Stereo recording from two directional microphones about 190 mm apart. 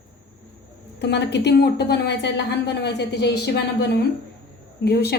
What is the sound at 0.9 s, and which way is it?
A woman's voice, 65° left (ahead or behind).